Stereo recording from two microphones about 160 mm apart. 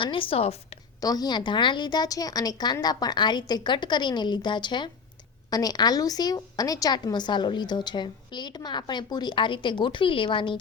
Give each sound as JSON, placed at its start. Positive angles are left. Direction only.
{"t": 0.0, "sound": "a woman's voice", "side_deg": 35}
{"t": 1.0, "sound": "a woman's voice", "side_deg": 25}